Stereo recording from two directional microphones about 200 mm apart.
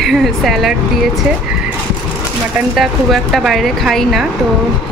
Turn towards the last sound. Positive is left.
turn(degrees=0)  # may be behind; listen again after turning